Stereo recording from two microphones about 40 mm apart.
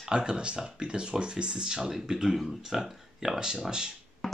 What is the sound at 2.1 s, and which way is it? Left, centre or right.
Mantra, centre.